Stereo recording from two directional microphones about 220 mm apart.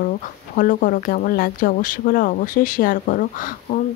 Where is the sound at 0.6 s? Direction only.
40° left (ahead or behind).